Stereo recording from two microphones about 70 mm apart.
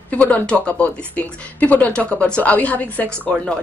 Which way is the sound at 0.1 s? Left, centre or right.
Left.